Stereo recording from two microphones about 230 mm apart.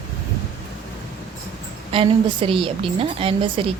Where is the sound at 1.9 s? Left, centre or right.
Right.